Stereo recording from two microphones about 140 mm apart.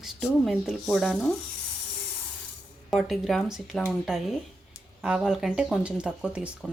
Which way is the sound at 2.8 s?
Centre (ahead or behind).